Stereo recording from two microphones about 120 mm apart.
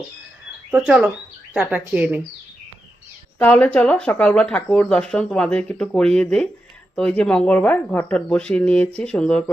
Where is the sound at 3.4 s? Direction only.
10° left (ahead or behind).